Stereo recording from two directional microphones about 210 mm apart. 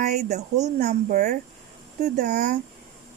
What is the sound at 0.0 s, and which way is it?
Speech, 35° right (ahead or behind).